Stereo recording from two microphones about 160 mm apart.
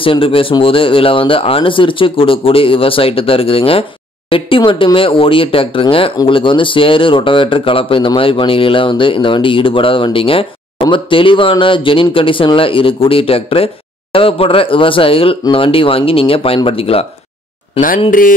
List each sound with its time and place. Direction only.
0.0 s speech: 35° left (ahead or behind)
17.7 s speech: 60° left (ahead or behind)